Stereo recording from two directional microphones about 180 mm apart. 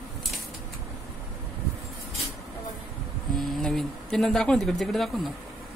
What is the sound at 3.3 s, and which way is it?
Speech, centre (ahead or behind).